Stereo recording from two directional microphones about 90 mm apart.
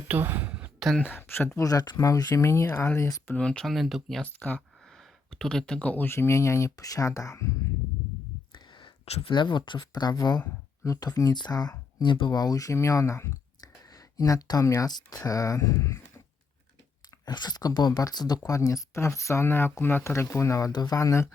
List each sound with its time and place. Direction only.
0.1 s a sound: 20° right (ahead or behind)
0.9 s speech: 25° left (ahead or behind)
1.5 s speech: 45° left (ahead or behind); by 3.1 s 25° left (ahead or behind)
3.3 s speech: 10° left (ahead or behind)
4.2 s speech: 15° left (ahead or behind)
4.9 s speech: 5° left (ahead or behind); by 7.5 s 35° left (ahead or behind)
8.5 s speech: 65° left (ahead or behind); by 12.0 s 45° left (ahead or behind)
12.0 s speech: 65° left (ahead or behind); by 16.2 s 35° left (ahead or behind)
17.2 s speech: 50° left (ahead or behind); by 21.2 s 35° left (ahead or behind)